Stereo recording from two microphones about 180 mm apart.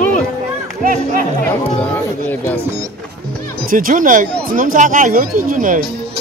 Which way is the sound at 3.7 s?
50° right (ahead or behind).